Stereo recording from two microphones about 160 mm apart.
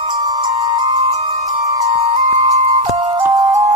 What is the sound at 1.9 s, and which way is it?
Music, 35° right (ahead or behind).